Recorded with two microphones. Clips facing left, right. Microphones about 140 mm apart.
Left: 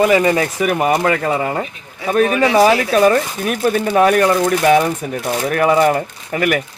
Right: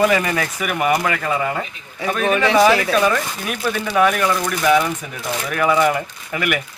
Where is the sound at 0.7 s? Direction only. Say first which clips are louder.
Left 2 dB; 35° left (ahead or behind).